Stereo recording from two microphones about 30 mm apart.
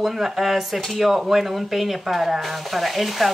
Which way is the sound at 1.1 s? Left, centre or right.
Centre.